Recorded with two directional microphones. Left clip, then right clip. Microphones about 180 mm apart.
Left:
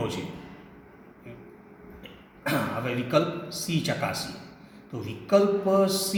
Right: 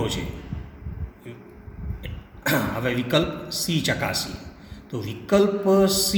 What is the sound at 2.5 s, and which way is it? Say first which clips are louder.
A man's voice: right 4 dB; 35° right (ahead or behind).